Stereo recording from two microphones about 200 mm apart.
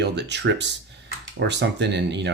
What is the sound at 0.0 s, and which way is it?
Speech, 60° right (ahead or behind).